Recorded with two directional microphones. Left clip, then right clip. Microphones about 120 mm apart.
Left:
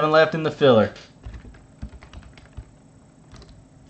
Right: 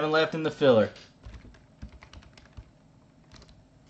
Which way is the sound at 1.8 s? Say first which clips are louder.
Left 5 dB; 25° right (ahead or behind).